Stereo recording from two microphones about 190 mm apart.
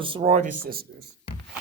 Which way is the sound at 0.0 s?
30° right (ahead or behind).